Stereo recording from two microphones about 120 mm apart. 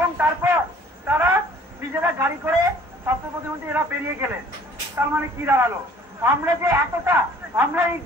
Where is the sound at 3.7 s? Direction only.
20° right (ahead or behind).